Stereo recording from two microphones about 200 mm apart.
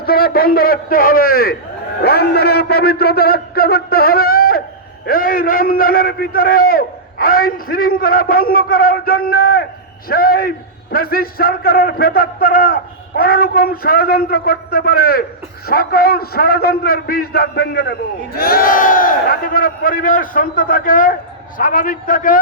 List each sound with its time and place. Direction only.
0.0 s a man's voice: 50° left (ahead or behind)